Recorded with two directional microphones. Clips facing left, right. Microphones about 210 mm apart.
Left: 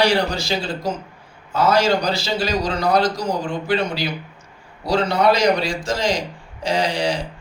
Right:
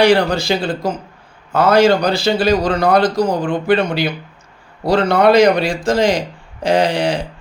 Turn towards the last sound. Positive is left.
turn(degrees=-55)  # may be behind; listen again after turning